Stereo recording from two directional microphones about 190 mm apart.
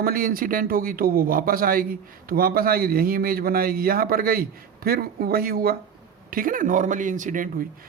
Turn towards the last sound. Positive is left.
turn(degrees=-45)  # may be behind; listen again after turning